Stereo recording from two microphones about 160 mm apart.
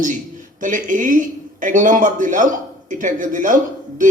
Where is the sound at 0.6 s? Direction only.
55° right (ahead or behind).